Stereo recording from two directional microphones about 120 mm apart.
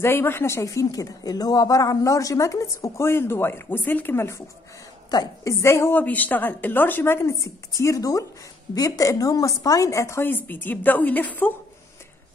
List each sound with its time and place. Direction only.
0.0 s speech: 20° left (ahead or behind)
5.1 s speech: 30° left (ahead or behind); by 11.5 s 15° left (ahead or behind)